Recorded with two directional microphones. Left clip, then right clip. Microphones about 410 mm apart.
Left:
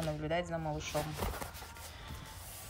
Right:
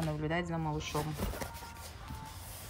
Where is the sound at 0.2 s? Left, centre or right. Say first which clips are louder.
Right 1 dB; centre.